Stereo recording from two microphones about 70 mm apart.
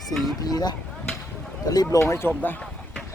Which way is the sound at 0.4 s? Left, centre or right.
Left.